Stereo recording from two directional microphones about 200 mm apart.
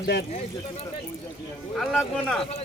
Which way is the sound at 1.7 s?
Centre (ahead or behind).